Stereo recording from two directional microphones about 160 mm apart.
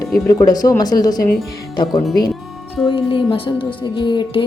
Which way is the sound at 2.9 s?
30° left (ahead or behind).